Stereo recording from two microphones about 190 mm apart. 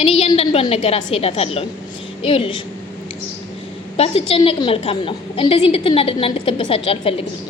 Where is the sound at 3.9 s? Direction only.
30° left (ahead or behind).